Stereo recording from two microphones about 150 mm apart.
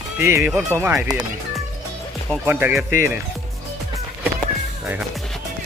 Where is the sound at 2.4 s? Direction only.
10° right (ahead or behind).